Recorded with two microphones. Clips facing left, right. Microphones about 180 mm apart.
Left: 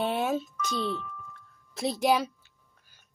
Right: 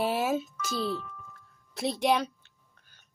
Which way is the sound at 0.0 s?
5° right (ahead or behind).